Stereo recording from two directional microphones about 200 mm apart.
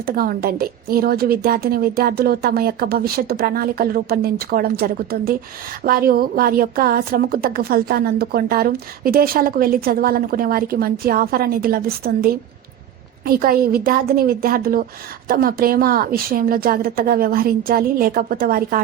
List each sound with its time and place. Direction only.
0.0 s a woman's voice: 45° right (ahead or behind)